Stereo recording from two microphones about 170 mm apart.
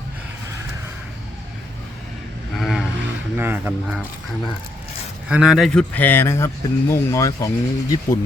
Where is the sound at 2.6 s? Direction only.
Centre (ahead or behind).